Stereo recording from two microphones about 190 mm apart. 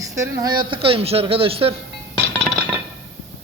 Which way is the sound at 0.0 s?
15° right (ahead or behind).